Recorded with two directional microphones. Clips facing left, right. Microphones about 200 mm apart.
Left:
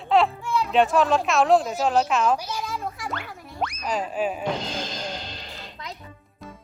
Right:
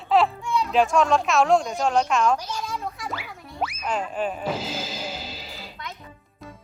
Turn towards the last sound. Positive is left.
turn(degrees=-5)  # may be behind; listen again after turning